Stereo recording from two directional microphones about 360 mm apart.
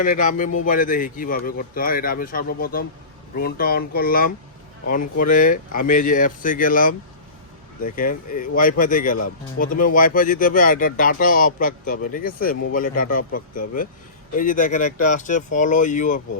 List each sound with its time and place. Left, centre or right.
0.0 s speech: left
7.9 s speech: left